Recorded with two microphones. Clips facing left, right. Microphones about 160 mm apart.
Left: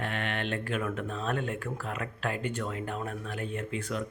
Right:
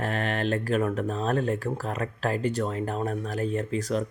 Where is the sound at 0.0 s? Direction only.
40° right (ahead or behind).